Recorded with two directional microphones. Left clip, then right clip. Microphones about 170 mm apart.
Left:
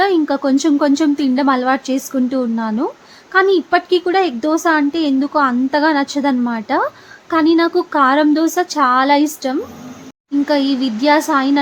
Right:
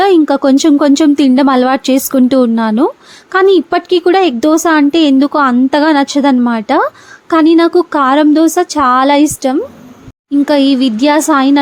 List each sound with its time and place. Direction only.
0.0 s a woman's voice: 45° right (ahead or behind)